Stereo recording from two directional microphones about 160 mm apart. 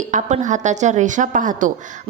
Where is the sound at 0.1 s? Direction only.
50° right (ahead or behind).